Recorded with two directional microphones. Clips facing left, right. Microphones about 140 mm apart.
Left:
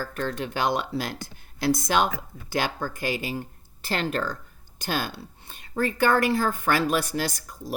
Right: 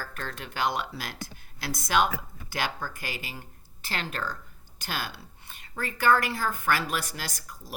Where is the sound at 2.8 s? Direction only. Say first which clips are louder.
Left 8 dB; 30° left (ahead or behind).